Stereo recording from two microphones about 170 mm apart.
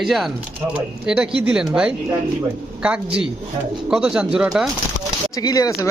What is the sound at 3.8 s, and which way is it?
Speech, 5° right (ahead or behind).